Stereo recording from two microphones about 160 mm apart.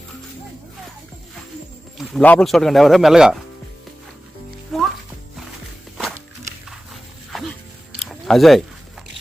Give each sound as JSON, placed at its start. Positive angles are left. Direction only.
{"t": 2.0, "sound": "speech", "side_deg": 5}
{"t": 4.7, "sound": "music", "side_deg": 0}
{"t": 6.7, "sound": "dog", "side_deg": 0}
{"t": 8.0, "sound": "biting", "side_deg": 0}